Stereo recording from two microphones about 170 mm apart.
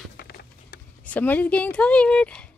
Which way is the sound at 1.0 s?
10° left (ahead or behind).